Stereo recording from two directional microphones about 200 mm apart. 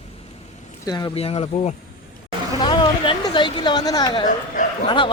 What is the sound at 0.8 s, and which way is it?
Speech, 20° left (ahead or behind).